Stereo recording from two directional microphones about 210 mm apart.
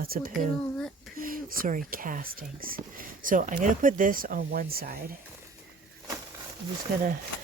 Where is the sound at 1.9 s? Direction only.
40° right (ahead or behind).